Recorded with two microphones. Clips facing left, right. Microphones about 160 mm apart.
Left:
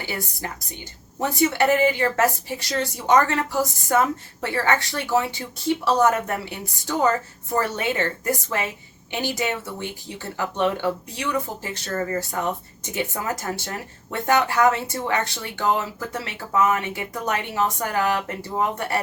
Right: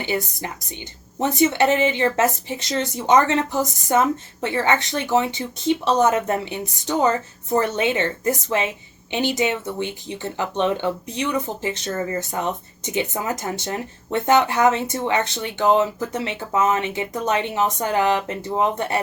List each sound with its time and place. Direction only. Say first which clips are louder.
0.0 s a woman's voice: right 5 dB; 20° right (ahead or behind)